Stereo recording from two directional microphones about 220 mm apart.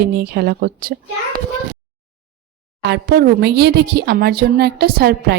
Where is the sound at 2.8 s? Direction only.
45° right (ahead or behind).